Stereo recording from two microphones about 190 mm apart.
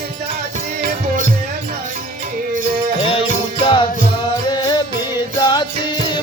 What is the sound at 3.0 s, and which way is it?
Music, 30° left (ahead or behind).